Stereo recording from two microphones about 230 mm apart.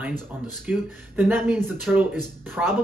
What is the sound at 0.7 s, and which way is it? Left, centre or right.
Speech, centre.